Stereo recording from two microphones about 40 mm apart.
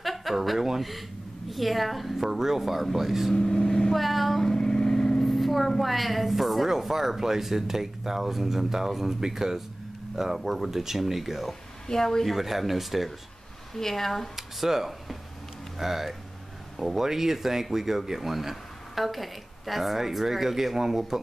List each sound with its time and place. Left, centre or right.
0.0 s a woman's voice: centre
3.3 s speech: centre
3.9 s a woman's voice: centre
4.5 s vehicle: centre
5.2 s a woman's voice: centre
11.9 s speech: centre
12.3 s a woman's voice: centre
13.7 s speech: centre
14.3 s a woman's voice: centre